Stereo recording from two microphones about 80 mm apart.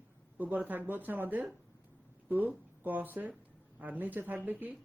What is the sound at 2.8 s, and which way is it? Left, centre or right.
Speech, right.